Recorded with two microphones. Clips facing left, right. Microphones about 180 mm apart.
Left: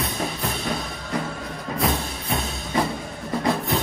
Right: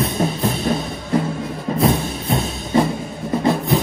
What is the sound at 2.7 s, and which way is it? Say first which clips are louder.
Music: right 7 dB; 30° right (ahead or behind).